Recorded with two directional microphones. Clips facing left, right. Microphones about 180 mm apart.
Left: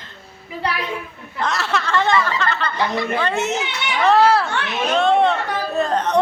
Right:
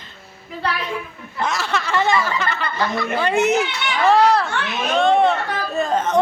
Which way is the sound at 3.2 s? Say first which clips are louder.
Right 4 dB; 15° right (ahead or behind).